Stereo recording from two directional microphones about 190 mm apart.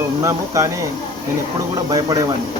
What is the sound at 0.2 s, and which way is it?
Speech, 15° right (ahead or behind).